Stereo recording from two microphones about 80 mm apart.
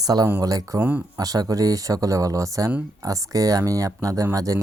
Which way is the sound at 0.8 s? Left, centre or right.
Right.